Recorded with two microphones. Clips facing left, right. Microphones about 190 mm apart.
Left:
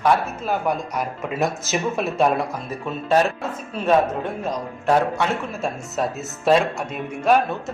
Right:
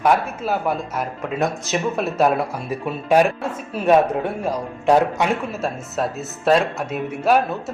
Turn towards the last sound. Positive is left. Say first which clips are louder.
# right 1 dB
turn(degrees=-5)  # may be behind; listen again after turning